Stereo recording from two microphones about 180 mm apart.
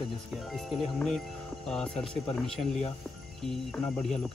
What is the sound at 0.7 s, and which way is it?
Speech, centre (ahead or behind).